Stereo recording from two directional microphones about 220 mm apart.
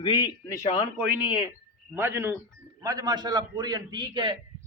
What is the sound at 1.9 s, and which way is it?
A man's voice, 10° right (ahead or behind).